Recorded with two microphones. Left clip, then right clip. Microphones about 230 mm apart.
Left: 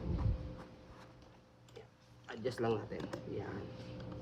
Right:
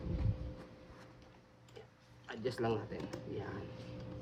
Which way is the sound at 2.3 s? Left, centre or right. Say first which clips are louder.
Even; centre.